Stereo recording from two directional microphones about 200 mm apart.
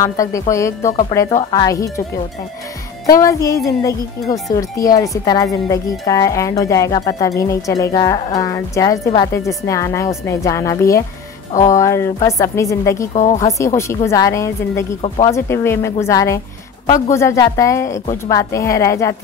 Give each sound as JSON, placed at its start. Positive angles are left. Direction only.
{"t": 0.0, "sound": "speech", "side_deg": 15}
{"t": 3.1, "sound": "speech", "side_deg": 15}
{"t": 13.1, "sound": "speech", "side_deg": 35}
{"t": 13.5, "sound": "speech", "side_deg": 15}
{"t": 15.0, "sound": "speech", "side_deg": 30}
{"t": 15.3, "sound": "speech", "side_deg": 15}